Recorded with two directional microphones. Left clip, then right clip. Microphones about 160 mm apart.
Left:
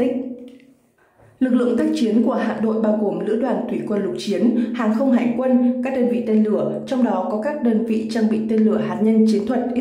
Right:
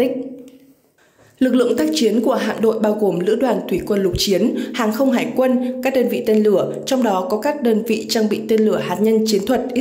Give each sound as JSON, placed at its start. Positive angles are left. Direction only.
{"t": 1.4, "sound": "a woman's voice", "side_deg": -25}